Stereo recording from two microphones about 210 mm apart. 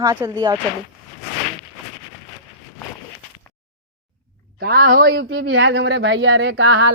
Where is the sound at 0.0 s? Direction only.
15° right (ahead or behind).